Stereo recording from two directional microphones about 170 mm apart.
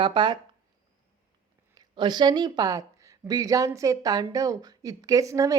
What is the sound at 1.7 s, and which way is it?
Speech, 25° right (ahead or behind).